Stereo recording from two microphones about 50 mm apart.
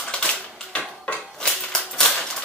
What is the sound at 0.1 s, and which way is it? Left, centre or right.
Typewriter, centre.